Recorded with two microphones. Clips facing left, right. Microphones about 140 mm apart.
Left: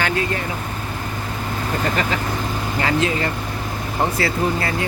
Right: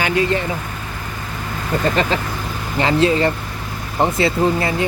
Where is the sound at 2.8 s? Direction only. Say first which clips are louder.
Right 6 dB; 30° right (ahead or behind).